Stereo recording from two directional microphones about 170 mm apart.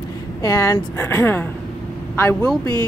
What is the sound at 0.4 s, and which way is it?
Speech, 20° left (ahead or behind).